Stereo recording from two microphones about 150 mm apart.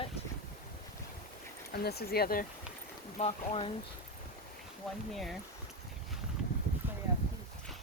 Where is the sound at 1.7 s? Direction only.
90° left.